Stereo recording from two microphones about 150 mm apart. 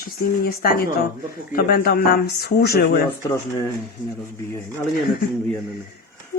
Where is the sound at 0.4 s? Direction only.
90° left.